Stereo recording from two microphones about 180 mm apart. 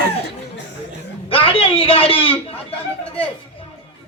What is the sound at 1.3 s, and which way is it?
A man's voice, 30° left (ahead or behind).